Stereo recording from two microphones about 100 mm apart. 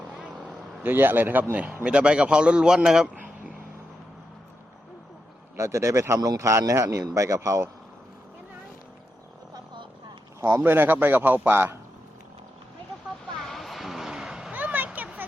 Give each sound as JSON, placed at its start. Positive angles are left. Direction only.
{"t": 0.8, "sound": "speech", "side_deg": -20}
{"t": 5.5, "sound": "speech", "side_deg": -30}
{"t": 10.4, "sound": "speech", "side_deg": -25}
{"t": 13.4, "sound": "vehicle", "side_deg": 0}
{"t": 14.5, "sound": "a sound", "side_deg": -15}